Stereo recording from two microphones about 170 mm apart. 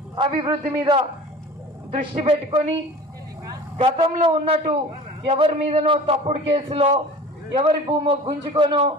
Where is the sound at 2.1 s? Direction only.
35° right (ahead or behind).